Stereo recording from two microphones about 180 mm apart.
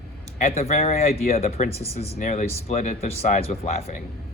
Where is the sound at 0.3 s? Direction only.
35° left (ahead or behind).